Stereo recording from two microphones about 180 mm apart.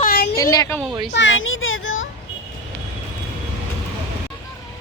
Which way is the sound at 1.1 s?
90° left.